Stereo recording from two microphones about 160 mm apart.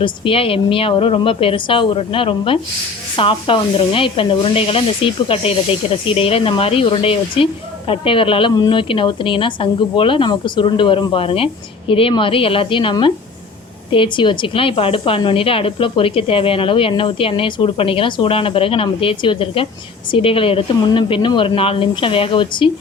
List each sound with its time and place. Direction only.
0.0 s a woman's voice: 35° left (ahead or behind)